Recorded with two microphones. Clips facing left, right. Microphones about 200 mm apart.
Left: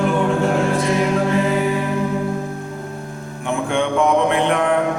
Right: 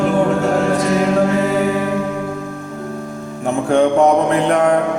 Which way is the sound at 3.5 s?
40° right (ahead or behind).